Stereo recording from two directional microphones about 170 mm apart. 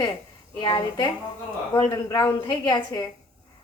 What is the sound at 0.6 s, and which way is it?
A woman's voice, 25° left (ahead or behind).